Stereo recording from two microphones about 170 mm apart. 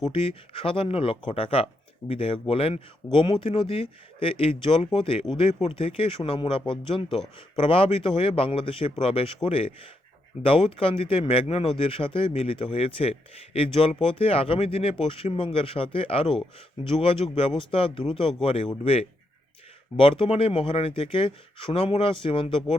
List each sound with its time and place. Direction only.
0.0 s speech: 30° left (ahead or behind)
20.0 s speech: 30° left (ahead or behind)